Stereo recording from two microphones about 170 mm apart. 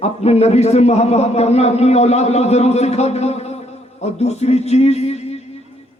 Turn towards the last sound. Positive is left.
turn(degrees=40)  # may be behind; listen again after turning